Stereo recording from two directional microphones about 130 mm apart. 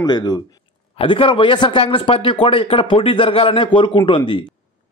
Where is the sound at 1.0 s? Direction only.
40° left (ahead or behind).